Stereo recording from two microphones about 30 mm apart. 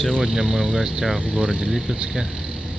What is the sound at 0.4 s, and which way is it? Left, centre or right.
Speech, centre.